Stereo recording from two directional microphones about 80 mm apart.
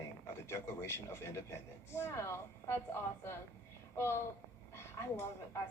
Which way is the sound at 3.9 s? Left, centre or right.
Left.